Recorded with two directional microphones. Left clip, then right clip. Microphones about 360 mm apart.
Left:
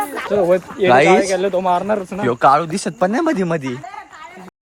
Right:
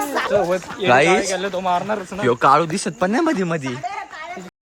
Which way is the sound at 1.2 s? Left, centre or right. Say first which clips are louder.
Left 5 dB; centre.